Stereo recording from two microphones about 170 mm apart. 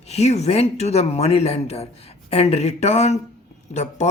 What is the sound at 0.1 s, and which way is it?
Speech, 40° left (ahead or behind).